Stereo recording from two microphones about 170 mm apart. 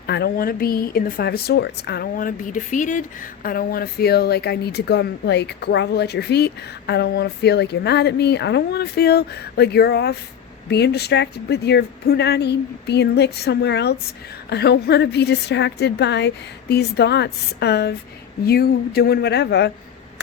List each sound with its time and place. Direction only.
0.1 s speech: 65° left (ahead or behind)